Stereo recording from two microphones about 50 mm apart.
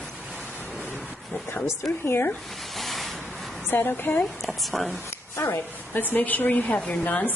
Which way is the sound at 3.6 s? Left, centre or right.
Left.